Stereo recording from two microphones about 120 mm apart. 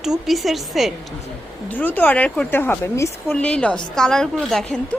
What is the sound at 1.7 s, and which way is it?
A woman's voice, 15° left (ahead or behind).